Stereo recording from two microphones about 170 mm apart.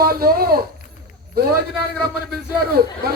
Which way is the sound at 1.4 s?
65° right (ahead or behind).